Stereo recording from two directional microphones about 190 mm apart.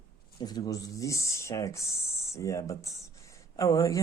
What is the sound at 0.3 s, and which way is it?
Speech, 20° left (ahead or behind).